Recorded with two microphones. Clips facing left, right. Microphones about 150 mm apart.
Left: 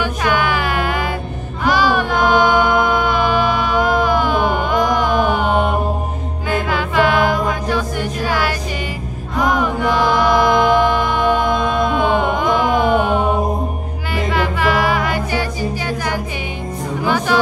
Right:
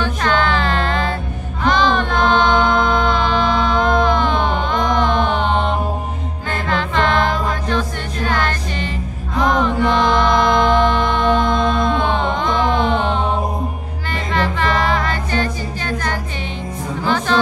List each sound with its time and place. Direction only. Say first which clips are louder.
0.0 s music: even; 10° left (ahead or behind)
1.6 s chant: even; 10° left (ahead or behind)
6.5 s music: left 2 dB; 10° left (ahead or behind)